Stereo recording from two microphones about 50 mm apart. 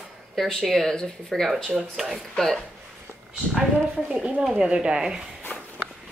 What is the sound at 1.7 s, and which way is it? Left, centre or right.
Speech, centre.